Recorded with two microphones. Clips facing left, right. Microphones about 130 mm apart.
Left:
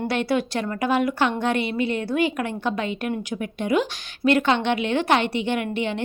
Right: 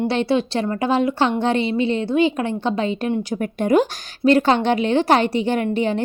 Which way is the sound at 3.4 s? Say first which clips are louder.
Right 6 dB; 45° right (ahead or behind).